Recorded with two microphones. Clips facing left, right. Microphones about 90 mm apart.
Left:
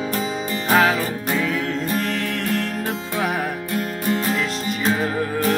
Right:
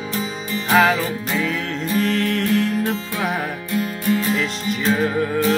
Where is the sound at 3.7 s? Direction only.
45° left (ahead or behind).